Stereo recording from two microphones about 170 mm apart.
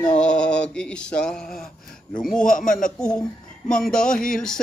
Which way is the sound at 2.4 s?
50° left (ahead or behind).